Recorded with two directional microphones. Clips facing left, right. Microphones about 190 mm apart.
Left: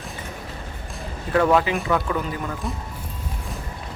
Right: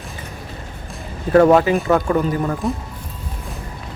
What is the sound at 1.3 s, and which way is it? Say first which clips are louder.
Speech: right 7 dB; 45° right (ahead or behind).